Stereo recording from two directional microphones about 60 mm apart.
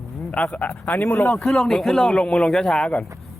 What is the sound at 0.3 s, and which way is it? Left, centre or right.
Speech, left.